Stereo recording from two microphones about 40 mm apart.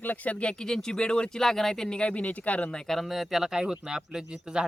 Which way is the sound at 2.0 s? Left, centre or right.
Left.